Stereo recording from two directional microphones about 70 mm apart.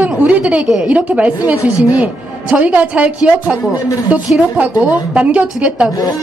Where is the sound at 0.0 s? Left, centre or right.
Right.